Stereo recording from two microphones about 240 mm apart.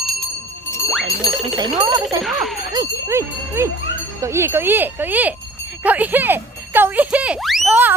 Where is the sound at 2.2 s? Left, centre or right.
Centre.